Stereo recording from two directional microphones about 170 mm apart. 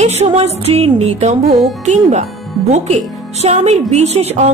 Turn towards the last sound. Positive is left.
turn(degrees=-40)  # may be behind; listen again after turning